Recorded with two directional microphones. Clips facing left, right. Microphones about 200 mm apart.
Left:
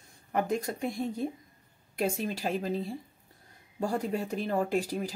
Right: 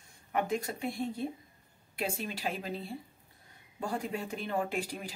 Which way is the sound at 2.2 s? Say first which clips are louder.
Left 5 dB; 40° left (ahead or behind).